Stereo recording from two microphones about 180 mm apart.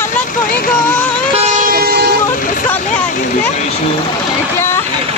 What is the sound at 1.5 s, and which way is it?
Vehicle, 50° right (ahead or behind).